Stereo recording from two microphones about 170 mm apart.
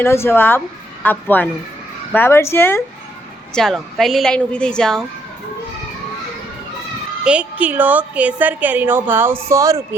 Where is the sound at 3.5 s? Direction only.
Centre (ahead or behind).